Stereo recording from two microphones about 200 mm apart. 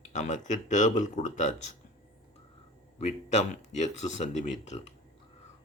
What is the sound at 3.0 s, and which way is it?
Speech, 35° left (ahead or behind).